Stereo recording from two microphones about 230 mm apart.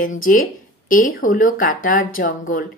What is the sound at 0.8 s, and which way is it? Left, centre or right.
A woman's voice, left.